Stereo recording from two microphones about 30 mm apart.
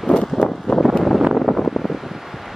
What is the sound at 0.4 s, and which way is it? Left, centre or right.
Vehicle, left.